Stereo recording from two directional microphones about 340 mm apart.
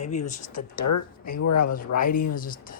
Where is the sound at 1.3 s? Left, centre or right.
Left.